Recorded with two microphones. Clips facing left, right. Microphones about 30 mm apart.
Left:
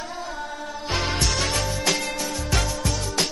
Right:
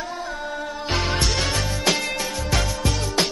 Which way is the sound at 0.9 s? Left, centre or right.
Centre.